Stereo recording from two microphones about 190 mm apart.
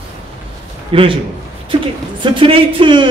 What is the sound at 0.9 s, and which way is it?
Speech, 30° right (ahead or behind).